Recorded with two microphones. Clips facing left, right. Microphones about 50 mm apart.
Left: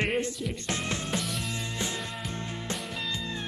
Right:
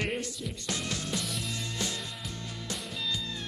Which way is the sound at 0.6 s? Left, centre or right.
Left.